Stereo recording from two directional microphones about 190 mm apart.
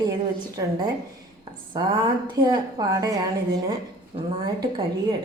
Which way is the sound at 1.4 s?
25° right (ahead or behind).